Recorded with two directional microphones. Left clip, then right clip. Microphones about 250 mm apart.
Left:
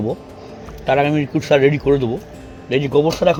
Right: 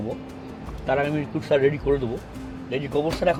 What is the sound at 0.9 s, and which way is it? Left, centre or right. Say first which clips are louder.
Speech: left 8 dB; left.